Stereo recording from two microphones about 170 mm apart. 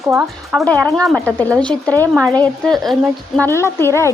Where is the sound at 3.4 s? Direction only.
15° left (ahead or behind).